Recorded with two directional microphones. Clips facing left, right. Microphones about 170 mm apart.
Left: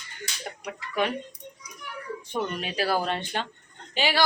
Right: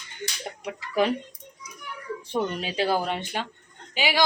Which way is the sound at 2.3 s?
30° right (ahead or behind).